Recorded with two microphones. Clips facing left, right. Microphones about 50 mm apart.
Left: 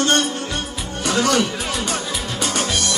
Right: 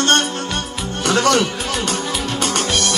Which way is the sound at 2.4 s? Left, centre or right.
Right.